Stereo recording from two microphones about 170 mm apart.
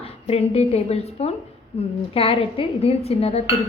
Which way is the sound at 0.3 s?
35° left (ahead or behind).